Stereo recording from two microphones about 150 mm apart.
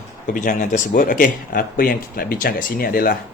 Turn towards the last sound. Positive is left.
turn(degrees=75)  # may be behind; listen again after turning